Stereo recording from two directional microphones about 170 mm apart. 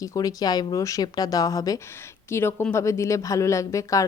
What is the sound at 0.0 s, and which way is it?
Speech, 20° left (ahead or behind).